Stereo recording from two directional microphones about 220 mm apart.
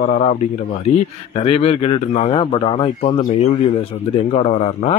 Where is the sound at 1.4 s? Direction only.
25° left (ahead or behind).